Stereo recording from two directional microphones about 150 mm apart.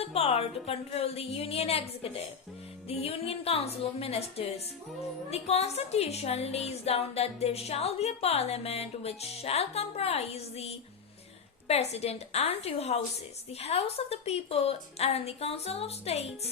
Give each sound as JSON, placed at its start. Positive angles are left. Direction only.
{"t": 0.0, "sound": "a woman's voice", "side_deg": 40}